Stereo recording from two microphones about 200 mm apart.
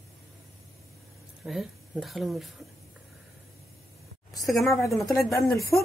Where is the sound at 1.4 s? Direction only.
Centre (ahead or behind).